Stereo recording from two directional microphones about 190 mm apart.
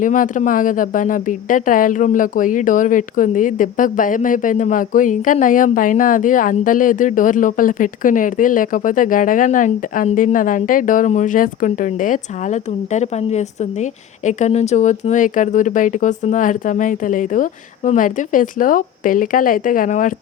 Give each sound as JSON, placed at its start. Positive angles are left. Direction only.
{"t": 0.0, "sound": "a woman's voice", "side_deg": 45}